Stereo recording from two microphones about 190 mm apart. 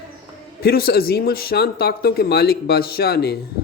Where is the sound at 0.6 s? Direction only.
55° left (ahead or behind).